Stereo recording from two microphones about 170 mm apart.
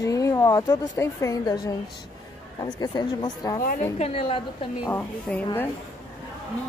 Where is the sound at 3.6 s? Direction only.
55° left (ahead or behind).